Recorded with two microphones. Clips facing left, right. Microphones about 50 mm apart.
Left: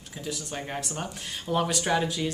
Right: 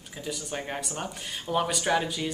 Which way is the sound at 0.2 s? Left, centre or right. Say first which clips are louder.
Right 1 dB; centre.